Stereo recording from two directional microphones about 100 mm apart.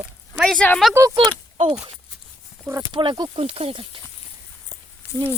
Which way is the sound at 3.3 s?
80° right.